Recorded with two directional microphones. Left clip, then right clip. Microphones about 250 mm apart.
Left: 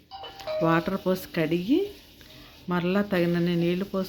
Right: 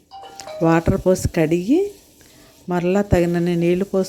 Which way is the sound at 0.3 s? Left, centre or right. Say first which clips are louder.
Right 6 dB; right.